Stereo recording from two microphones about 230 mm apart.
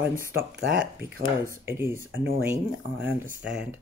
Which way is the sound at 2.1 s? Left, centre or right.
Right.